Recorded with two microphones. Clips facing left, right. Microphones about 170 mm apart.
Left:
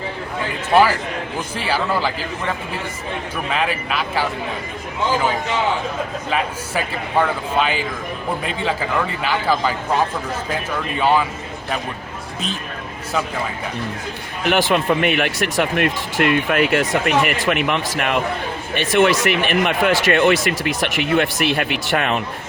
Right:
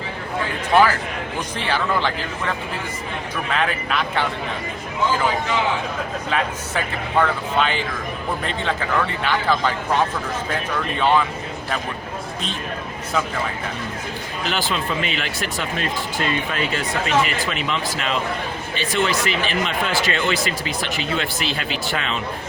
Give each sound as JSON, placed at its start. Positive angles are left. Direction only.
{"t": 0.7, "sound": "a man's voice", "side_deg": 10}
{"t": 3.5, "sound": "a man's voice", "side_deg": 5}
{"t": 6.3, "sound": "a man's voice", "side_deg": 5}
{"t": 14.4, "sound": "speech", "side_deg": 60}